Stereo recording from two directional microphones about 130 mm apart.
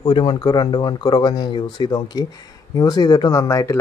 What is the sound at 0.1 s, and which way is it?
Speech, 35° left (ahead or behind).